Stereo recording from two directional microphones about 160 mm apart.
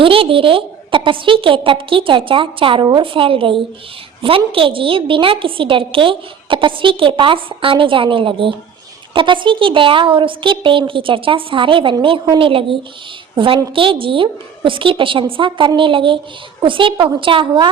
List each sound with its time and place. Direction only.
0.0 s a woman's voice: 35° right (ahead or behind)